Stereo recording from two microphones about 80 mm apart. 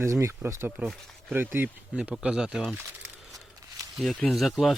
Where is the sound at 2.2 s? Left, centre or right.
Centre.